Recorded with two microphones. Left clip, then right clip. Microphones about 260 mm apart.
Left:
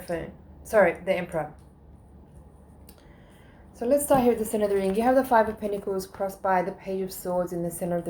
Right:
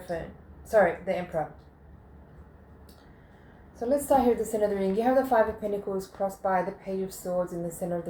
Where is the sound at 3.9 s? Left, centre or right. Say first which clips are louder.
Left 2 dB; left.